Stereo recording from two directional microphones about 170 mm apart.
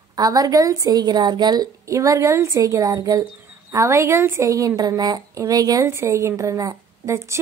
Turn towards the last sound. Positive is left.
turn(degrees=-15)  # may be behind; listen again after turning